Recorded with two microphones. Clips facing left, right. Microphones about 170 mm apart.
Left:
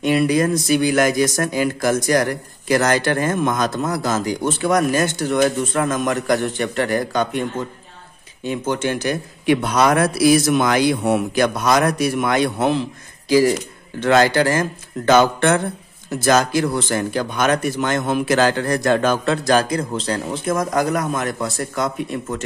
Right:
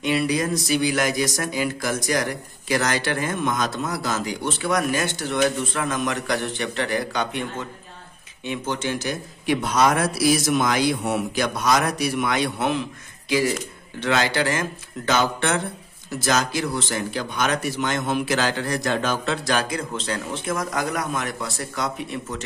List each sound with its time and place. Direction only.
0.0 s speech: 50° left (ahead or behind)
8.5 s a man's voice: 50° left (ahead or behind)